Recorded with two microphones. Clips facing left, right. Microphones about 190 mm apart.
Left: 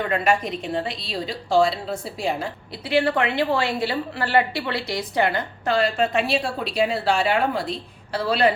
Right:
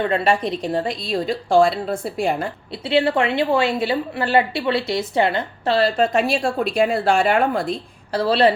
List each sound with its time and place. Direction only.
0.1 s a woman's voice: 30° right (ahead or behind); by 2.5 s 55° right (ahead or behind)
2.7 s a woman's voice: 25° right (ahead or behind)